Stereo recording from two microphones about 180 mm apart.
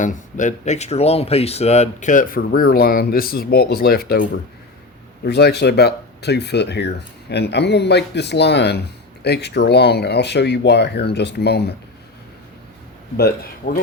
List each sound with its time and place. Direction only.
0.0 s speech: 45° left (ahead or behind); by 11.7 s 65° left (ahead or behind)
13.1 s speech: 60° left (ahead or behind)